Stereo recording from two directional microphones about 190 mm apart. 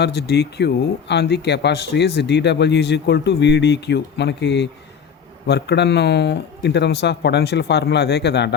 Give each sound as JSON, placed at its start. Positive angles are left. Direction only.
{"t": 0.0, "sound": "speech", "side_deg": 60}